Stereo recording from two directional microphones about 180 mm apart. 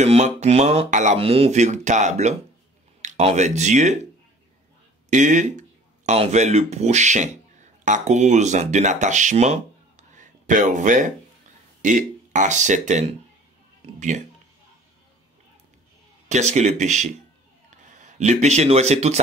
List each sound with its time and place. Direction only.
0.0 s speech: 40° right (ahead or behind)
5.1 s speech: 45° right (ahead or behind)
16.3 s speech: 40° right (ahead or behind)